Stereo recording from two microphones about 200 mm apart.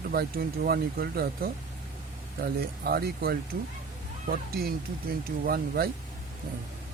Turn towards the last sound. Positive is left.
turn(degrees=-50)  # may be behind; listen again after turning